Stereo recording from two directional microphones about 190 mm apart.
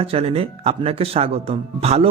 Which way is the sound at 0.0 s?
30° right (ahead or behind).